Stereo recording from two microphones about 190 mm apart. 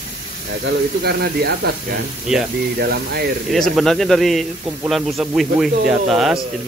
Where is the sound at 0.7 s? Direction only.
55° right (ahead or behind).